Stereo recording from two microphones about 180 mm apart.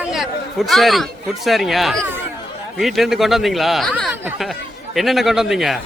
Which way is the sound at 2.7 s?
Centre (ahead or behind).